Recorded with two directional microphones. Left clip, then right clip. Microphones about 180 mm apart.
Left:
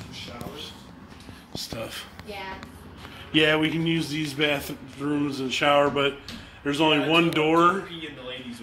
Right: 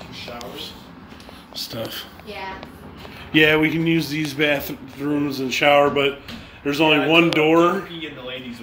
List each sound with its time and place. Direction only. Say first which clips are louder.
1.5 s speech: right 5 dB; 15° right (ahead or behind)
3.3 s speech: right 5 dB; 10° right (ahead or behind)